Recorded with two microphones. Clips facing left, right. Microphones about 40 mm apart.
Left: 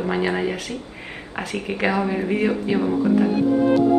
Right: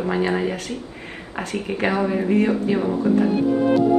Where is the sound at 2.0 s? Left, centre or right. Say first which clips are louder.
Right 2 dB; centre.